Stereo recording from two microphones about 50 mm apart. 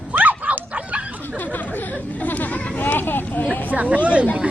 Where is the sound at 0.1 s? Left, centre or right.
Right.